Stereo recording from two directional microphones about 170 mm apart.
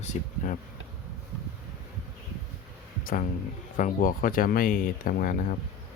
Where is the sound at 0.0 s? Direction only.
50° left (ahead or behind).